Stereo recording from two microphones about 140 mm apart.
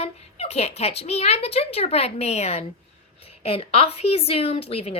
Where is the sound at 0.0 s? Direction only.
50° left (ahead or behind).